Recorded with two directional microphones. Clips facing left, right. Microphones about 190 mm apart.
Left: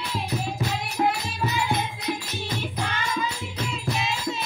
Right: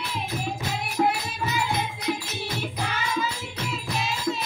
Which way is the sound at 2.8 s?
5° right (ahead or behind).